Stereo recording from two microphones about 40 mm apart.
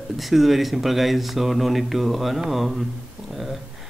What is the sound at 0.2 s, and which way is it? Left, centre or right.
Mantra, centre.